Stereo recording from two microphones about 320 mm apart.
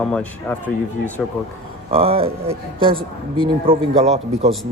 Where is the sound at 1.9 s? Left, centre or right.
Centre.